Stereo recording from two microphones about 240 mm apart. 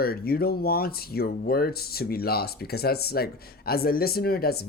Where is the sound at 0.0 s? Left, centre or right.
Left.